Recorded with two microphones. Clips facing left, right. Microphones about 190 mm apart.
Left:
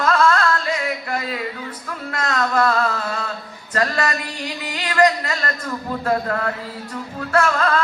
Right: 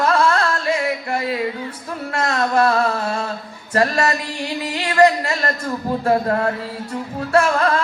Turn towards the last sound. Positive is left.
turn(degrees=-25)  # may be behind; listen again after turning